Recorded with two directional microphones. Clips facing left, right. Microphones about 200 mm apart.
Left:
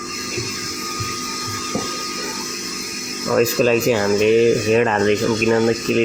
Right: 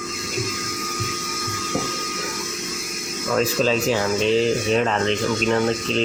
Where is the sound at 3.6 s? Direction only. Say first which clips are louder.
Left 4 dB; 15° left (ahead or behind).